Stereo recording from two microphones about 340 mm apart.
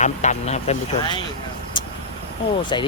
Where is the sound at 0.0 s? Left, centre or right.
Left.